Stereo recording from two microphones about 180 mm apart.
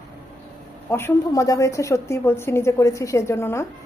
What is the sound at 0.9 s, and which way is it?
A woman's voice, 15° left (ahead or behind).